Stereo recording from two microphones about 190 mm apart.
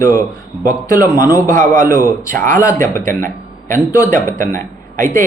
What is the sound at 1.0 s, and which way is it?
Speech, 45° right (ahead or behind).